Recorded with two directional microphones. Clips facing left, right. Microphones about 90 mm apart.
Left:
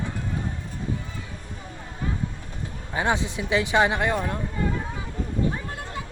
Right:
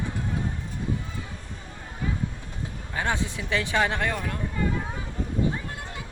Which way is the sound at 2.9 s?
15° left (ahead or behind).